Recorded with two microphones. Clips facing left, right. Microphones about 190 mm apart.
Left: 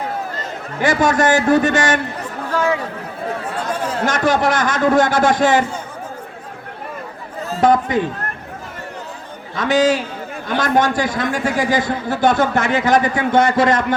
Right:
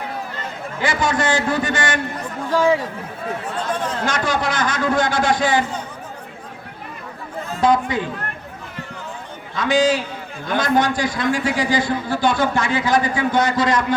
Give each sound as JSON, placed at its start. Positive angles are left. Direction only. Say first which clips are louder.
{"t": 0.9, "sound": "a man's voice", "louder": "left 5 dB", "side_deg": 45}
{"t": 4.0, "sound": "a man's voice", "louder": "left 7 dB", "side_deg": 45}
{"t": 7.5, "sound": "a man's voice", "louder": "left 3 dB", "side_deg": 45}
{"t": 9.6, "sound": "a man's voice", "louder": "left 2 dB", "side_deg": 45}
{"t": 11.8, "sound": "a man's voice", "louder": "left 2 dB", "side_deg": 20}
{"t": 12.4, "sound": "a man's voice", "louder": "left 3 dB", "side_deg": 45}